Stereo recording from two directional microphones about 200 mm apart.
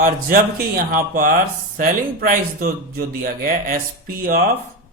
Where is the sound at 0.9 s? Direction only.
45° right (ahead or behind).